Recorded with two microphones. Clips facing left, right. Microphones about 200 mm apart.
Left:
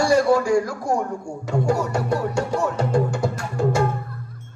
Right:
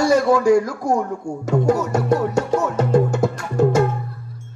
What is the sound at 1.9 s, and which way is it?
Music, 45° right (ahead or behind).